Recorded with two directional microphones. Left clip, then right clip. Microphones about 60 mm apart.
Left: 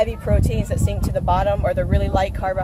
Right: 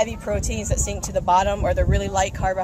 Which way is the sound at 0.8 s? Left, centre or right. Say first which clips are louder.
Even; centre.